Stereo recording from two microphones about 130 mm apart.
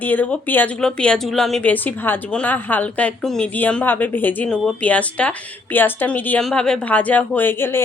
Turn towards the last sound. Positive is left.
turn(degrees=20)  # may be behind; listen again after turning